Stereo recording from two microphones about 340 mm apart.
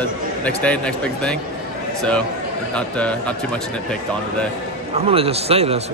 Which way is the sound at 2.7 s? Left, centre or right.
Centre.